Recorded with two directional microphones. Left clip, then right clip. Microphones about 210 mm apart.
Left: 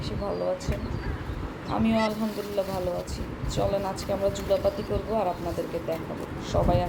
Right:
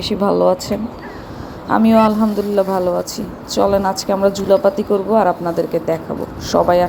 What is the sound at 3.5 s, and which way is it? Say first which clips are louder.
Speech: right 13 dB; 35° right (ahead or behind).